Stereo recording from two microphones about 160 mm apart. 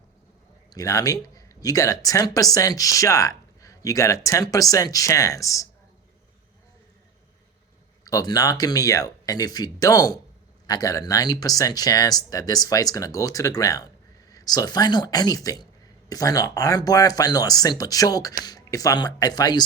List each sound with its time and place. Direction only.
0.7 s speech: 20° left (ahead or behind)
8.0 s speech: 25° left (ahead or behind)